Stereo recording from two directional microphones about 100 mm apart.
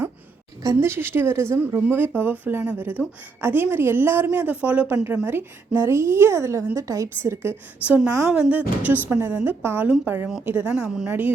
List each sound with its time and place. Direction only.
0.6 s a woman's voice: 30° right (ahead or behind)
7.9 s a woman's voice: 15° right (ahead or behind)